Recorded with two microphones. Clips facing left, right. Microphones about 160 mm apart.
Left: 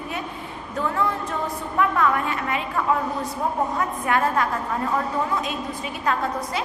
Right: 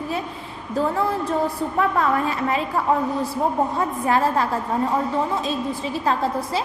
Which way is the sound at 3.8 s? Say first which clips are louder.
Right 2 dB; 30° right (ahead or behind).